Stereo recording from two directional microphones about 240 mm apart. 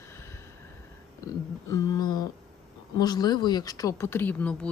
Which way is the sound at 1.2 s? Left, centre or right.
Centre.